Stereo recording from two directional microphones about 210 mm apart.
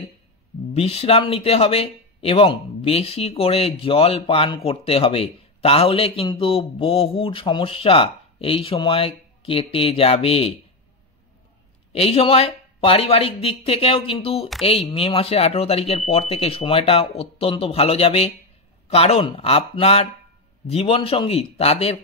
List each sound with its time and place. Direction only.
0.7 s speech: 30° left (ahead or behind)
11.9 s speech: 30° left (ahead or behind)